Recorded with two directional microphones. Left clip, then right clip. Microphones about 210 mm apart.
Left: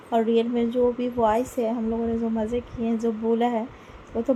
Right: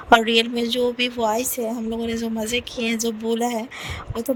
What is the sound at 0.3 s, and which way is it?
Speech, 50° right (ahead or behind).